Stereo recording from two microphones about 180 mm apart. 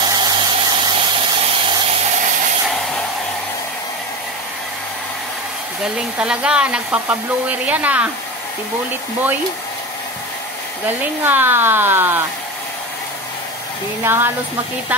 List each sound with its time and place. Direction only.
0.0 s a sound: 25° right (ahead or behind)
6.1 s speech: 5° right (ahead or behind)
11.2 s speech: 10° right (ahead or behind)
14.0 s speech: 10° right (ahead or behind)